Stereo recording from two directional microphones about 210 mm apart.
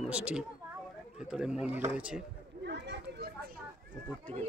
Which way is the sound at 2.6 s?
55° right (ahead or behind).